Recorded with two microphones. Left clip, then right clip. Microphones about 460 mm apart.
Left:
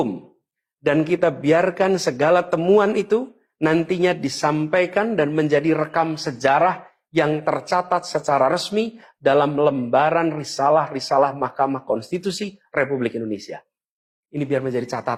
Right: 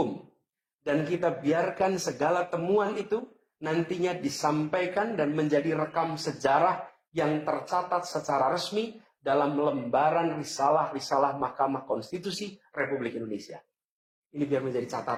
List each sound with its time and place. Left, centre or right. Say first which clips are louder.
0.9 s a man's voice: left 9 dB; left